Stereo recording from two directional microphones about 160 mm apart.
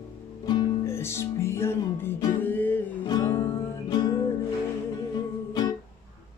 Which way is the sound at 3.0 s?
25° left (ahead or behind).